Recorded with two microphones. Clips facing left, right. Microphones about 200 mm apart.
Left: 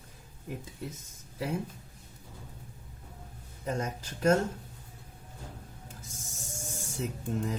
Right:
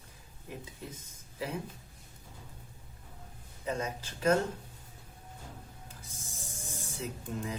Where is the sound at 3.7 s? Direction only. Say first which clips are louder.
Left 1 dB; 45° left (ahead or behind).